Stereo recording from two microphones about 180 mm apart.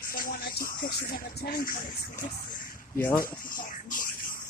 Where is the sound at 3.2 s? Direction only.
50° left (ahead or behind).